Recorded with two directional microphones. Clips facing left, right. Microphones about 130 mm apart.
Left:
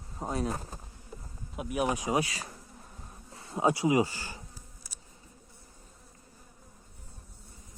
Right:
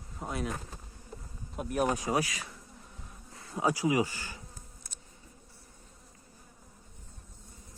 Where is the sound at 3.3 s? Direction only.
25° left (ahead or behind).